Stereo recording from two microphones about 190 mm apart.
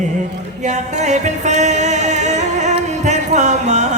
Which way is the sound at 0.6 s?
40° right (ahead or behind).